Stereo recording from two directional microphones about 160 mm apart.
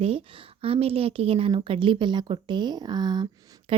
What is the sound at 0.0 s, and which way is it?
A woman's voice, 35° right (ahead or behind).